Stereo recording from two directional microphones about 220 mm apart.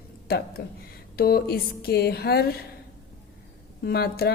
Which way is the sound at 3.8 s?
45° left (ahead or behind).